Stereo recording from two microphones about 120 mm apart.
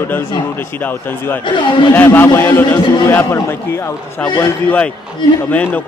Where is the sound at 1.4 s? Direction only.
40° left (ahead or behind).